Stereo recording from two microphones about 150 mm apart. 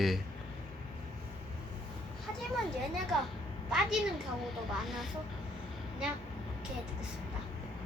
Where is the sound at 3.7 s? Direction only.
Centre (ahead or behind).